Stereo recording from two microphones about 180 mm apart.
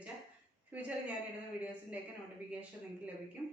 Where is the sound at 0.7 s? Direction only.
10° right (ahead or behind).